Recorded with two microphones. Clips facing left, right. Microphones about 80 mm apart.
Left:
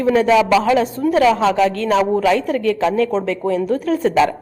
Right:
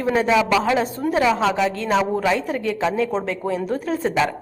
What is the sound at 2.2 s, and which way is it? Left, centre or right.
Speech, right.